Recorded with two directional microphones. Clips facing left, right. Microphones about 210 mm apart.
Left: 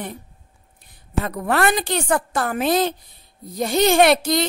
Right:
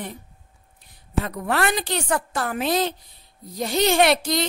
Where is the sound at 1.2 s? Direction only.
55° left (ahead or behind).